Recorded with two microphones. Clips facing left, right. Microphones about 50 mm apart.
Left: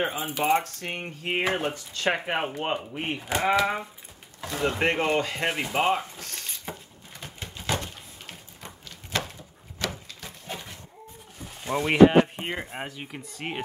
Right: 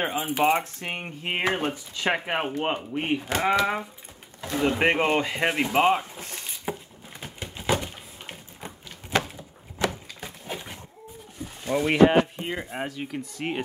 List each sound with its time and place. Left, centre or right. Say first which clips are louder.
0.0 s speech: right 3 dB; right
1.0 s speech: even; centre
4.8 s speech: right 1 dB; centre
5.5 s a sound: right 4 dB; centre
11.6 s speech: left 1 dB; centre